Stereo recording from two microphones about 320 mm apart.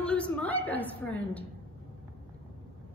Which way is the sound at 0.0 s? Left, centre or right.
Centre.